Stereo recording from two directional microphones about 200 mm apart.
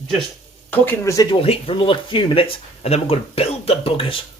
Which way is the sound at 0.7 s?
10° left (ahead or behind).